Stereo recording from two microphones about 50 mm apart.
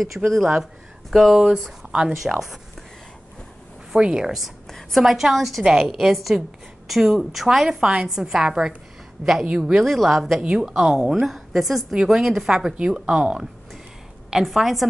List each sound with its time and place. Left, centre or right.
0.0 s a woman's voice: centre
1.8 s a woman's voice: centre
2.2 s a woman's voice: centre
3.9 s a woman's voice: centre
4.6 s a woman's voice: centre
10.4 s a woman's voice: centre
11.2 s a woman's voice: centre
12.7 s speech: centre
14.3 s a woman's voice: centre